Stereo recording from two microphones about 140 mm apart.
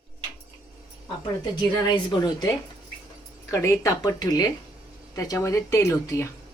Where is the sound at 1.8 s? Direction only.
30° left (ahead or behind).